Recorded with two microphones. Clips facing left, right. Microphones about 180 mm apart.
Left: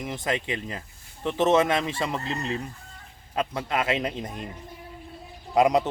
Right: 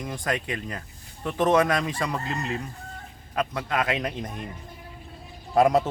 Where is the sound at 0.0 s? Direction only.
25° left (ahead or behind).